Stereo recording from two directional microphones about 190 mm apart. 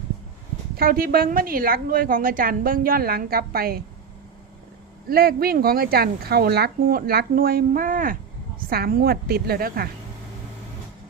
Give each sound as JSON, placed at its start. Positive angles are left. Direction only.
{"t": 0.8, "sound": "speech", "side_deg": -50}
{"t": 5.0, "sound": "speech", "side_deg": -50}